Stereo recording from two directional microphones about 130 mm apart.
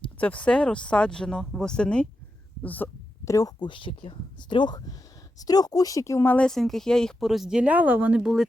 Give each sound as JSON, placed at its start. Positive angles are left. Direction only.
{"t": 0.2, "sound": "speech", "side_deg": 10}
{"t": 3.3, "sound": "speech", "side_deg": 30}